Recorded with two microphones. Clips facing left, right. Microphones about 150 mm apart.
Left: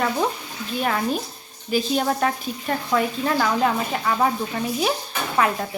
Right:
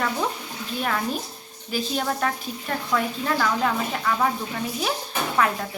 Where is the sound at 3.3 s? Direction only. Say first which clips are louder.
Left 2 dB; 15° left (ahead or behind).